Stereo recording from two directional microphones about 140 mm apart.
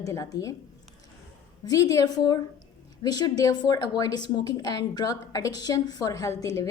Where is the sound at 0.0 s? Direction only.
25° left (ahead or behind).